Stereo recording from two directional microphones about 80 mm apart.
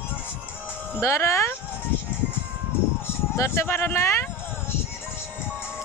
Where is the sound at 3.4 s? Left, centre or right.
Left.